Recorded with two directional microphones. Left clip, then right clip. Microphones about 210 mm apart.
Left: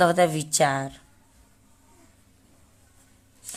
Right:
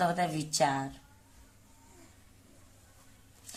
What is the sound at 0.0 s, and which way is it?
Speech, 55° left (ahead or behind).